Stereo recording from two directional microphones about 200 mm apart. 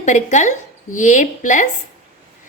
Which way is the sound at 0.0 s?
35° left (ahead or behind).